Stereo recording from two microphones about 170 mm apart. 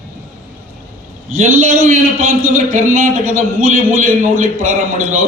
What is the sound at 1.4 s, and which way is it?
A man's voice, 50° right (ahead or behind).